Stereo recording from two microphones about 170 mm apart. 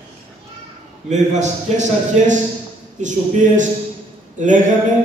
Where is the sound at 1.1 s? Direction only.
45° right (ahead or behind).